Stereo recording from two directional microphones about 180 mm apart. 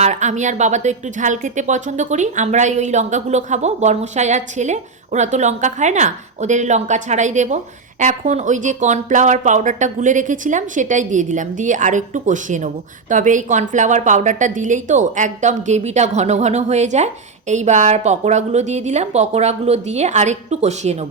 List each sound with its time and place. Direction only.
0.0 s a woman's voice: 40° right (ahead or behind)